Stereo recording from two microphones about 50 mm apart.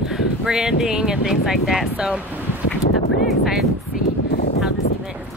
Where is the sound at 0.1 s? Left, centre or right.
Centre.